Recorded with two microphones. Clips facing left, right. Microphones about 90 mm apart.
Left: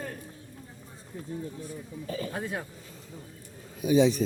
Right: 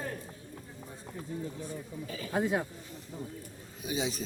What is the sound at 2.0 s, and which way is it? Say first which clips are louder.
Speech: left 11 dB; 40° left (ahead or behind).